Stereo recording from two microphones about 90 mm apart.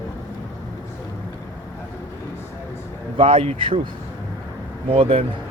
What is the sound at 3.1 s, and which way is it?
Speech, 90° right.